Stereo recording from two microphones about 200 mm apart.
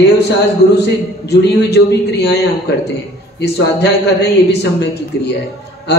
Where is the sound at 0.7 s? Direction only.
55° left (ahead or behind).